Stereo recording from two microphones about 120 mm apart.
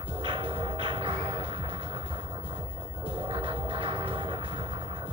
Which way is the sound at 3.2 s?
45° right (ahead or behind).